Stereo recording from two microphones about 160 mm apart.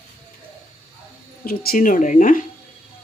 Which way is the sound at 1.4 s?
65° left (ahead or behind).